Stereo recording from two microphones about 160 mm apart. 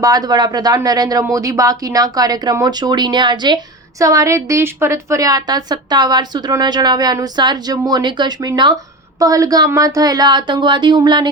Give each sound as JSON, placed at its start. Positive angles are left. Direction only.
{"t": 0.0, "sound": "a woman's voice", "side_deg": -25}